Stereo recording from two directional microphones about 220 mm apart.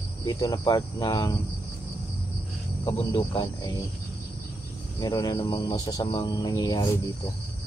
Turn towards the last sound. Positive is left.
turn(degrees=15)  # may be behind; listen again after turning